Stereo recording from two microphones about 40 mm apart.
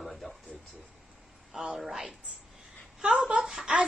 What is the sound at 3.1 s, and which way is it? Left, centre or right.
Speech, centre.